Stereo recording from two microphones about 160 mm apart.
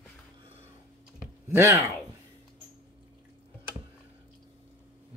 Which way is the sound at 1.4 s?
15° right (ahead or behind).